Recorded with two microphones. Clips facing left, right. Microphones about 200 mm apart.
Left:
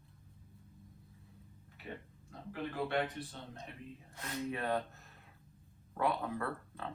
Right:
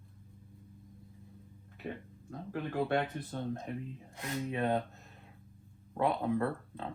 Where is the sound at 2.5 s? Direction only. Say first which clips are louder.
Right 5 dB; 50° right (ahead or behind).